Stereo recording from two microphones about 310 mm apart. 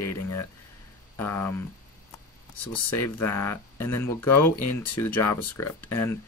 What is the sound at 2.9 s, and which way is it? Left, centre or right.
Speech, left.